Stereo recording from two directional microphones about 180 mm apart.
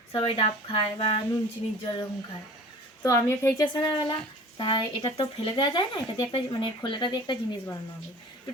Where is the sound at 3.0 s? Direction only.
15° left (ahead or behind).